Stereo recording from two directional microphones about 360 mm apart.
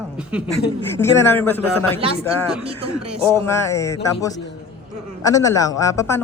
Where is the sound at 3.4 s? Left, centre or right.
Centre.